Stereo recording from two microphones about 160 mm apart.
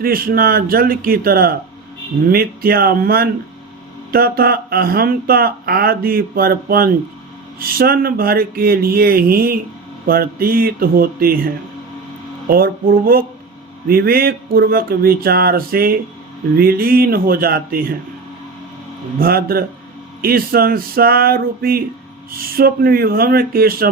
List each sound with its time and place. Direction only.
0.0 s speech: 65° right (ahead or behind)
19.2 s speech: 70° right (ahead or behind)